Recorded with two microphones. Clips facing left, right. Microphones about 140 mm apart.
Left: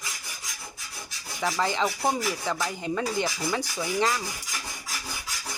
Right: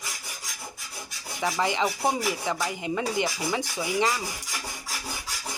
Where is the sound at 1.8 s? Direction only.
5° right (ahead or behind).